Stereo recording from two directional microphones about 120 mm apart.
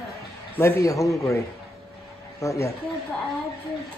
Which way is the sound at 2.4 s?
25° left (ahead or behind).